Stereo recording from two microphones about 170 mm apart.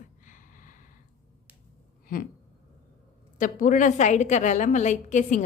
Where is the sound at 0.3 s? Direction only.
50° left (ahead or behind).